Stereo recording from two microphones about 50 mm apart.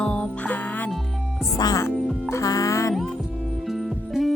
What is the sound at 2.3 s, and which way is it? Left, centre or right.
Music, left.